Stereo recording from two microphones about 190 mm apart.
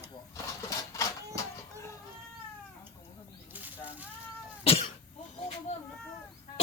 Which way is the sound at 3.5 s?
10° right (ahead or behind).